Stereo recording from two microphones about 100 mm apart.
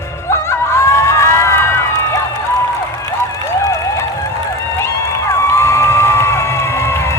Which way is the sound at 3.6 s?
30° left (ahead or behind).